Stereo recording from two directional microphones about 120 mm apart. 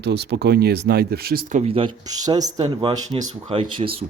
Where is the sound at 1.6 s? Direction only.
50° right (ahead or behind).